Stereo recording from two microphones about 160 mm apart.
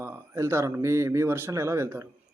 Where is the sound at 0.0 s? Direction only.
15° right (ahead or behind).